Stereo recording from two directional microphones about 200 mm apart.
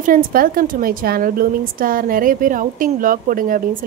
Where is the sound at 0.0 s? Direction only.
45° right (ahead or behind).